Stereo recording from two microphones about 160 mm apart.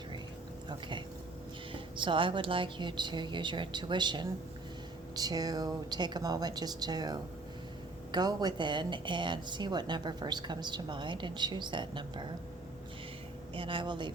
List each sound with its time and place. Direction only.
0.7 s a woman's voice: 30° right (ahead or behind)
13.5 s speech: 30° right (ahead or behind)